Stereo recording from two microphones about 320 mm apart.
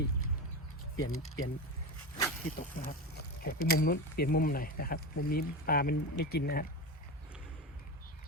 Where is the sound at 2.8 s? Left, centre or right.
Left.